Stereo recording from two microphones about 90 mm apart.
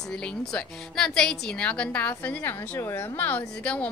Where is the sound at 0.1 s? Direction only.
10° left (ahead or behind).